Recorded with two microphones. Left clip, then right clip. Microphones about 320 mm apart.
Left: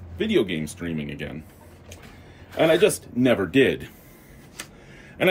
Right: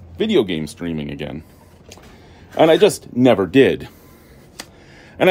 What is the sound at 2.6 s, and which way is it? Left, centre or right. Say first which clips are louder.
Speech: right 6 dB; centre.